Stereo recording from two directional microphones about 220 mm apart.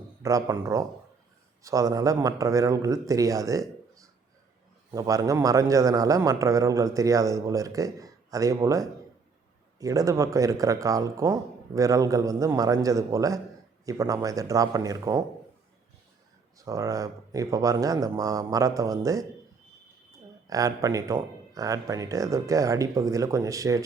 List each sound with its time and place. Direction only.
0.2 s a man's voice: 15° right (ahead or behind)
16.6 s a man's voice: 15° right (ahead or behind)
20.5 s a man's voice: 15° right (ahead or behind)